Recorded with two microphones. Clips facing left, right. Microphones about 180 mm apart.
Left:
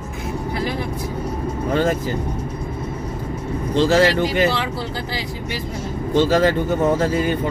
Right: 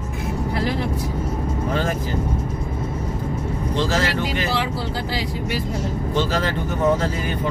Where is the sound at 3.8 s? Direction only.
60° left (ahead or behind).